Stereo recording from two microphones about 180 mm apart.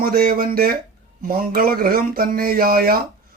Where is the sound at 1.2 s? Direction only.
55° right (ahead or behind).